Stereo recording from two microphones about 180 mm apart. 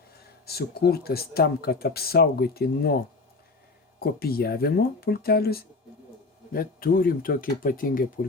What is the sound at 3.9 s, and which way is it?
Speech, 60° left (ahead or behind).